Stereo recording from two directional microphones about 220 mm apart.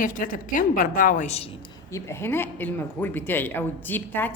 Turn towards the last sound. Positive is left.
turn(degrees=10)  # may be behind; listen again after turning